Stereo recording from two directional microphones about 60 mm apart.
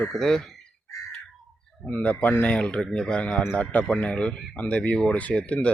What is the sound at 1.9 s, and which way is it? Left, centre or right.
Speech, left.